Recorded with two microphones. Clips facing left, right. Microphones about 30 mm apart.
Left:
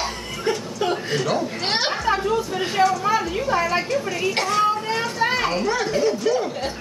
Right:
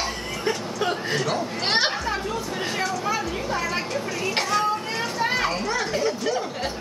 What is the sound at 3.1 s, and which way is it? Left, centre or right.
Speech, centre.